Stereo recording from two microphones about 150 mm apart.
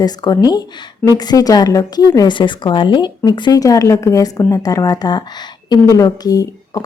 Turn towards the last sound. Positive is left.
turn(degrees=25)  # may be behind; listen again after turning